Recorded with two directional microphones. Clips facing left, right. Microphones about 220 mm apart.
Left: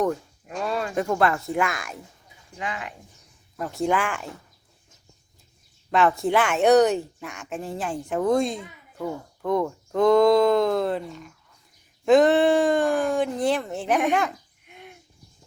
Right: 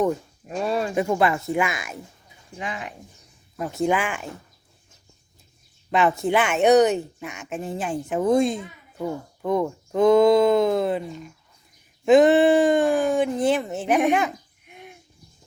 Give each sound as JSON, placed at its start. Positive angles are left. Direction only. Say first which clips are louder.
{"t": 0.4, "sound": "a sound", "louder": "right 3 dB", "side_deg": -25}
{"t": 0.9, "sound": "speech", "louder": "left 1 dB", "side_deg": -5}
{"t": 2.6, "sound": "speech", "louder": "even", "side_deg": -25}
{"t": 3.6, "sound": "speech", "louder": "right 1 dB", "side_deg": -5}
{"t": 5.9, "sound": "speech", "louder": "even", "side_deg": -5}
{"t": 9.0, "sound": "a child's voice", "louder": "right 2 dB", "side_deg": -15}